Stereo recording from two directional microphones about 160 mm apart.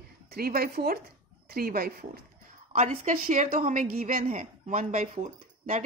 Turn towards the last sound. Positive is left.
turn(degrees=-50)  # may be behind; listen again after turning